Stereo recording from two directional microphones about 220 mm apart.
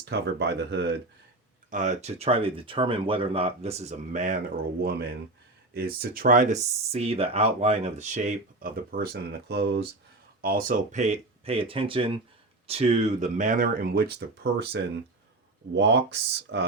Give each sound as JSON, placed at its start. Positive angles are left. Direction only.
{"t": 0.0, "sound": "speech", "side_deg": -50}
{"t": 1.7, "sound": "speech", "side_deg": -35}
{"t": 15.7, "sound": "speech", "side_deg": -50}